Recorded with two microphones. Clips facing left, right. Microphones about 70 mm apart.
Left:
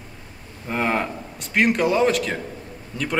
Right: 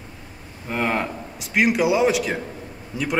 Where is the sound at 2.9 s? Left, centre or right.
Centre.